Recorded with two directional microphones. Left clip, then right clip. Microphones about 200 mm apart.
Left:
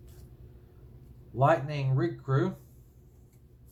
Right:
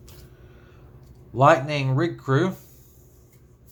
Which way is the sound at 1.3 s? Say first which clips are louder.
Right 8 dB; 35° right (ahead or behind).